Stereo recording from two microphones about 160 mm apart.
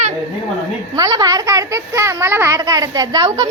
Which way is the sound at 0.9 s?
25° right (ahead or behind).